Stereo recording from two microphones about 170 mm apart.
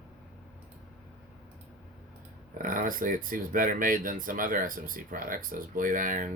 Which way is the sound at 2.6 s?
55° right (ahead or behind).